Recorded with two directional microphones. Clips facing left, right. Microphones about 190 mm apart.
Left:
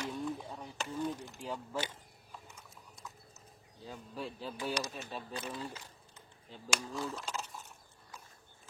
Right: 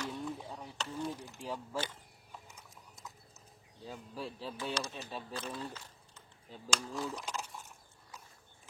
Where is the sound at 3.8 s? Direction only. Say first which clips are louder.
Even; 5° right (ahead or behind).